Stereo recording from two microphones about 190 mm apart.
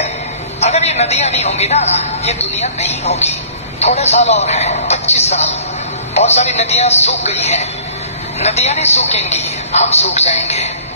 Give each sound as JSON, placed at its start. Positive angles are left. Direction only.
{"t": 0.6, "sound": "a man's voice", "side_deg": 35}